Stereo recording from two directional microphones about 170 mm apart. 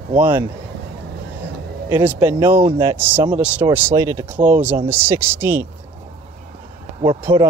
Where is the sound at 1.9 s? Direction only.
15° right (ahead or behind).